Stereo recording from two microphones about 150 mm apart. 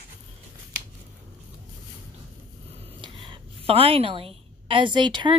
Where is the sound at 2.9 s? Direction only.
35° right (ahead or behind).